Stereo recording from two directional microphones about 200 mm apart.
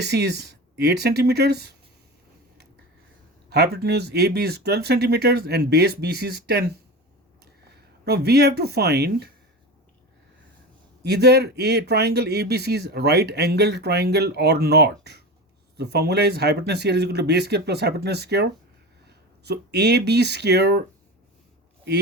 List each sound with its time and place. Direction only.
0.0 s speech: 55° right (ahead or behind)
3.5 s speech: 55° right (ahead or behind)
11.0 s speech: 55° right (ahead or behind)